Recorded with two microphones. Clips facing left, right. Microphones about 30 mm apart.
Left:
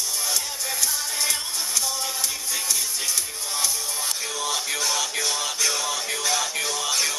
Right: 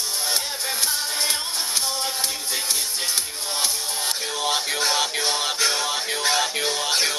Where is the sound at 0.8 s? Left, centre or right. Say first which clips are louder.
Right 1 dB; right.